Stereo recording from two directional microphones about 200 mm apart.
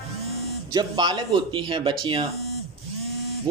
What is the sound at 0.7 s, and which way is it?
Speech, 20° right (ahead or behind).